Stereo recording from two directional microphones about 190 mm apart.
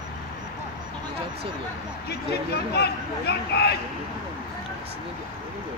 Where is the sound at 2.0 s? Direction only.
55° left (ahead or behind).